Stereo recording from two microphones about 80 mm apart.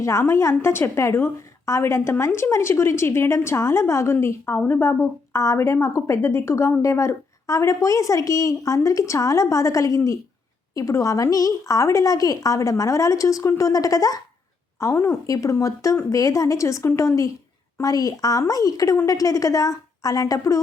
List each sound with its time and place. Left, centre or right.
0.0 s a woman's voice: left
14.8 s a woman's voice: left